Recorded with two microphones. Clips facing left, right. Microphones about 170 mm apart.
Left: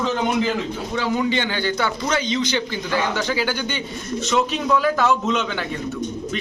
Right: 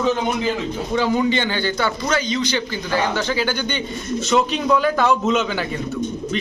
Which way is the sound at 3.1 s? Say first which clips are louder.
Right 1 dB; 10° left (ahead or behind).